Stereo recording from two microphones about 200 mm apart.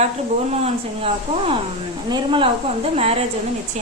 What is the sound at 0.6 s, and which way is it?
A woman's voice, 30° right (ahead or behind).